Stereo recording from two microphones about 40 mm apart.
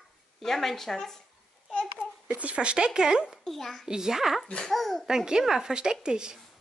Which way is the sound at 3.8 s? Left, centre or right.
Centre.